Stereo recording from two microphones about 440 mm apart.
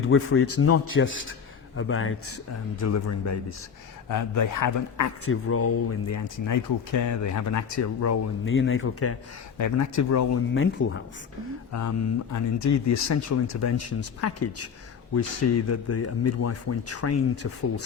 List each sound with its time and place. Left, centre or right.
0.1 s a man's voice: left
9.6 s speech: left
11.7 s speech: left